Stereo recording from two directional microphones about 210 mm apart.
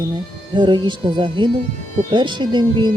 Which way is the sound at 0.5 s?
20° right (ahead or behind).